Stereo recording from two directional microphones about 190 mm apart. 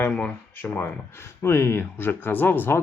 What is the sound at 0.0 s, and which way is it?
Speech, 10° left (ahead or behind).